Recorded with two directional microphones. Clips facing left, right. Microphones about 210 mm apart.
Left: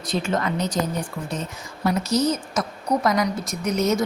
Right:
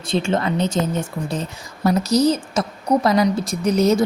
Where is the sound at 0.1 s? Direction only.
30° right (ahead or behind).